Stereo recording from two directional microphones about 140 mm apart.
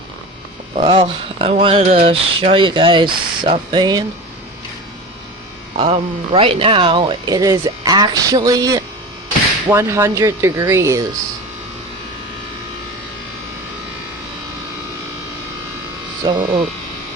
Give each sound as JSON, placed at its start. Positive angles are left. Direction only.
{"t": 0.8, "sound": "speech", "side_deg": -40}
{"t": 5.7, "sound": "speech", "side_deg": -45}
{"t": 16.2, "sound": "speech", "side_deg": -30}